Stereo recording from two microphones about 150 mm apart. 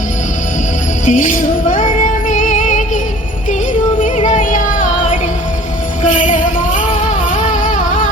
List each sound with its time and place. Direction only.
1.0 s music: 60° left (ahead or behind)
4.0 s music: 55° left (ahead or behind)
6.0 s music: 60° left (ahead or behind)
7.3 s a sound: 60° left (ahead or behind)